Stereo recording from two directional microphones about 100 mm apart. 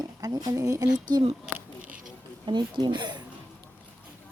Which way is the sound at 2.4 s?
50° right (ahead or behind).